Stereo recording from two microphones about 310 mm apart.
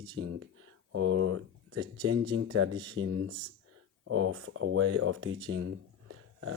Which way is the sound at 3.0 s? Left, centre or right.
Right.